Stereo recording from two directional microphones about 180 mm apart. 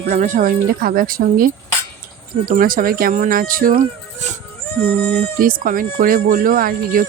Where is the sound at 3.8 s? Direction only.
40° right (ahead or behind).